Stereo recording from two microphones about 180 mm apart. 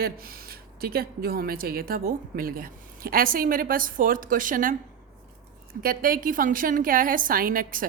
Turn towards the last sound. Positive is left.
turn(degrees=-50)  # may be behind; listen again after turning